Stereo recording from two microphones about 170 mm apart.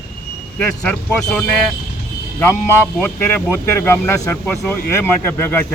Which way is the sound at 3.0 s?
15° left (ahead or behind).